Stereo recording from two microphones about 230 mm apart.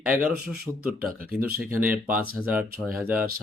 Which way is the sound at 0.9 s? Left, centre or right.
Right.